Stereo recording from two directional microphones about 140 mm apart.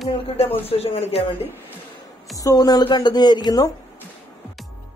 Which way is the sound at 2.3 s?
25° left (ahead or behind).